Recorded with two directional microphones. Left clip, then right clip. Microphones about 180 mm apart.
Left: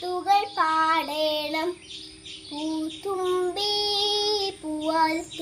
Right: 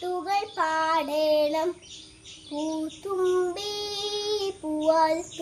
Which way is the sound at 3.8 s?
60° right (ahead or behind).